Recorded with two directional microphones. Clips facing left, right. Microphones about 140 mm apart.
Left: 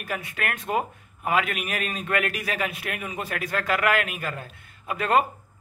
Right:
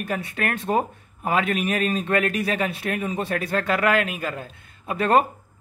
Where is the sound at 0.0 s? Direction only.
30° right (ahead or behind).